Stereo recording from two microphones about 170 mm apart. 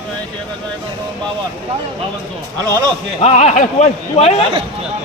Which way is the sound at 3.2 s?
40° left (ahead or behind).